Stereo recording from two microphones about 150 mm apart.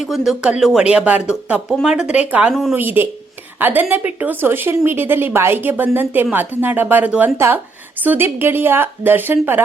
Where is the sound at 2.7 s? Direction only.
15° right (ahead or behind).